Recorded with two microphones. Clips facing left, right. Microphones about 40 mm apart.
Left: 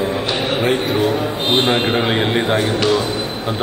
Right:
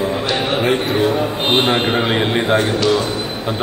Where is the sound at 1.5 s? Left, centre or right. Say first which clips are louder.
Even; right.